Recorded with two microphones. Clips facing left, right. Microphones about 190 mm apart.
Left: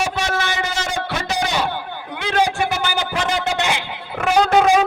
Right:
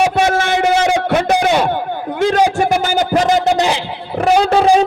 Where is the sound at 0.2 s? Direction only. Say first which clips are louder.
Right 8 dB; 50° right (ahead or behind).